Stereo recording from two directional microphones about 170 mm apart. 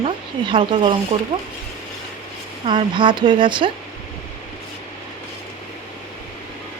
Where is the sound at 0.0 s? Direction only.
30° right (ahead or behind).